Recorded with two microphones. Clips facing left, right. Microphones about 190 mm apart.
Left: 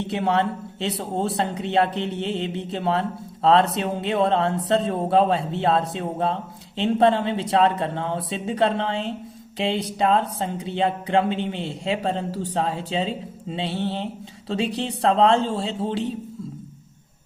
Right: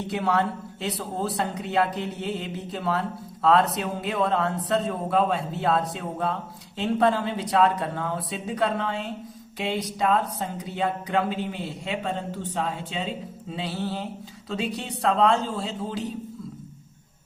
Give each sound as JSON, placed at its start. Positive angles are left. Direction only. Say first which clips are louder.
{"t": 0.0, "sound": "speech", "louder": "left 2 dB", "side_deg": 25}